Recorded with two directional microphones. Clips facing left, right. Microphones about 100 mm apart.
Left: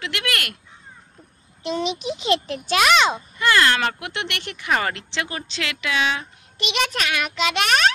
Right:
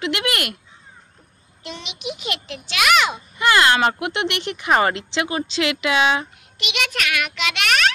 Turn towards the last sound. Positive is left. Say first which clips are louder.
# left 1 dB
turn(degrees=35)  # may be behind; listen again after turning